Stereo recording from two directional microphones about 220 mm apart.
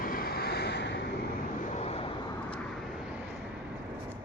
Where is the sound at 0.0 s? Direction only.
40° left (ahead or behind).